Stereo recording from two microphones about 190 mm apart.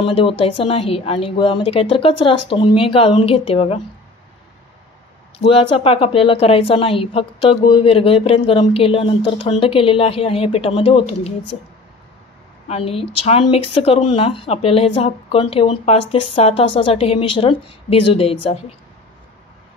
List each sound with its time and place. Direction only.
0.0 s a woman's voice: 25° left (ahead or behind)
5.4 s a woman's voice: 30° left (ahead or behind)
12.6 s speech: 30° left (ahead or behind)